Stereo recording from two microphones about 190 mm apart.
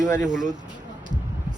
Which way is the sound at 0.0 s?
40° right (ahead or behind).